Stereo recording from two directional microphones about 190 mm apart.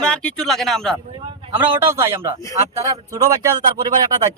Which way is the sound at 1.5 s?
15° right (ahead or behind).